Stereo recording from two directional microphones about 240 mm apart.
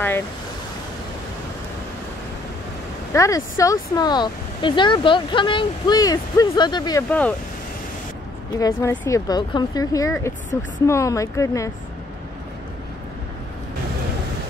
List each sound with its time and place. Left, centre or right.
3.1 s speech: centre
8.5 s speech: centre